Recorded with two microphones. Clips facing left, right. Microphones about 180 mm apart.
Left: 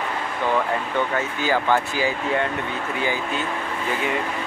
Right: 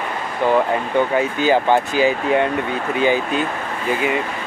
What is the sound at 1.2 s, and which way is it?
Speech, 20° right (ahead or behind).